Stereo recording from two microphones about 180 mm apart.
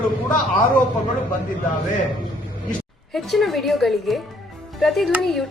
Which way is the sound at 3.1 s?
Centre (ahead or behind).